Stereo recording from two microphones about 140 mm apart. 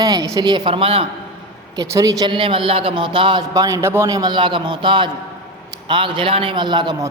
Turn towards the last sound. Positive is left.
turn(degrees=-30)  # may be behind; listen again after turning